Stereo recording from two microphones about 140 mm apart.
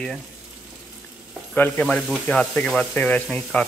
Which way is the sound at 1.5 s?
10° left (ahead or behind).